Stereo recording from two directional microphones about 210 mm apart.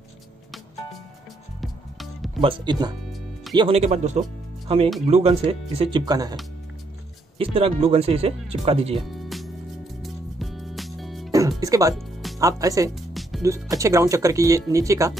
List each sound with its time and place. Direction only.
1.6 s music: centre (ahead or behind)
2.4 s speech: 25° right (ahead or behind)
7.3 s speech: 25° right (ahead or behind)
9.1 s music: centre (ahead or behind)
11.3 s music: 15° right (ahead or behind)
11.9 s music: centre (ahead or behind)
12.4 s speech: 15° right (ahead or behind)